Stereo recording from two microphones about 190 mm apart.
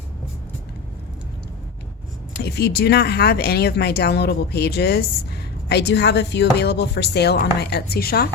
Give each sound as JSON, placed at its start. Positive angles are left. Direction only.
{"t": 2.4, "sound": "speech", "side_deg": 55}